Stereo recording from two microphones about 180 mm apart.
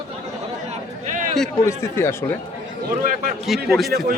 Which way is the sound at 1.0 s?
45° right (ahead or behind).